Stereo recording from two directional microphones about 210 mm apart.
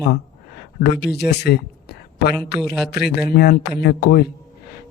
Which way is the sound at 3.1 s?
50° left (ahead or behind).